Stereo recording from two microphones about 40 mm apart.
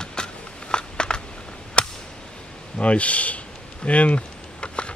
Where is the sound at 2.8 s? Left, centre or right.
Left.